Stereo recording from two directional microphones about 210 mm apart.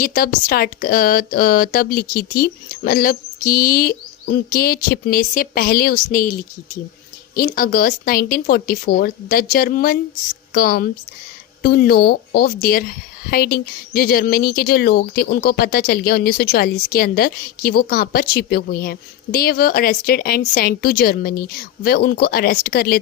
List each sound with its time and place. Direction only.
0.0 s speech: 45° left (ahead or behind)